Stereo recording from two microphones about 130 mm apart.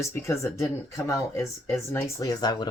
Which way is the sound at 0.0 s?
20° left (ahead or behind).